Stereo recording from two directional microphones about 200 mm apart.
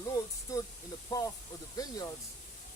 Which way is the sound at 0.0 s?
15° left (ahead or behind).